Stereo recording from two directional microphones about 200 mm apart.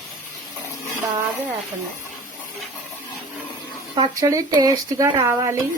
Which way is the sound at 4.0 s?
20° right (ahead or behind).